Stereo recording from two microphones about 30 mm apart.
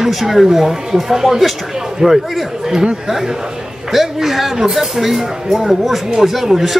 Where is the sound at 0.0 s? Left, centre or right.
Centre.